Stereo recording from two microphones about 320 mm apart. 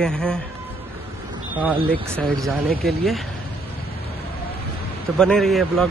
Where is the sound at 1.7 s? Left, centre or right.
Centre.